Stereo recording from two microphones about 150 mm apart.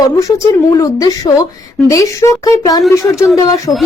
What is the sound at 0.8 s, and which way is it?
Speech, 25° left (ahead or behind).